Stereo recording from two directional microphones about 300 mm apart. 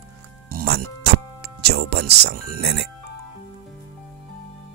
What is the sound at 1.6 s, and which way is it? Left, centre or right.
Speech, right.